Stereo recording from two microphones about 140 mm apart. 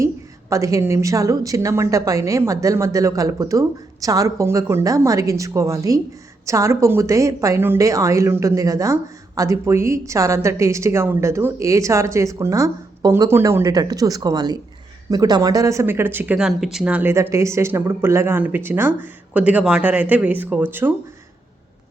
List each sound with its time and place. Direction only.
0.5 s a woman's voice: 20° right (ahead or behind)